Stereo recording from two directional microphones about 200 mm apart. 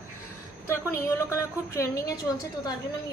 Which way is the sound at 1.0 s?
15° left (ahead or behind).